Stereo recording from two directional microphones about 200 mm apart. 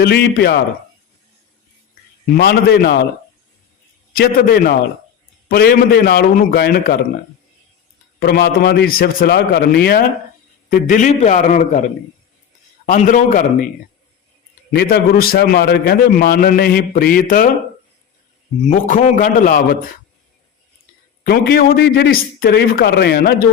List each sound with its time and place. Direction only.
0.0 s a man's voice: 55° left (ahead or behind)
2.3 s a man's voice: 50° left (ahead or behind)
4.1 s a man's voice: 50° left (ahead or behind)
8.2 s a man's voice: 50° left (ahead or behind)
14.7 s a man's voice: 50° left (ahead or behind)
18.6 s a man's voice: 40° left (ahead or behind)
21.2 s a man's voice: 55° left (ahead or behind)